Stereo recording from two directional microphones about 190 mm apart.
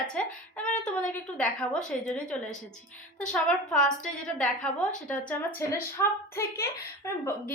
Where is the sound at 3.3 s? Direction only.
5° left (ahead or behind).